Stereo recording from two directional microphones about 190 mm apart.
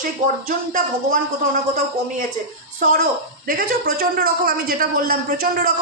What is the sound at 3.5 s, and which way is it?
A man's voice, 50° right (ahead or behind).